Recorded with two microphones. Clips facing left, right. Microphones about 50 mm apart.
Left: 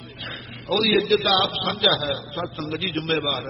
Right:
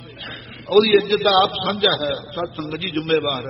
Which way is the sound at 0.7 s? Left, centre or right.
Centre.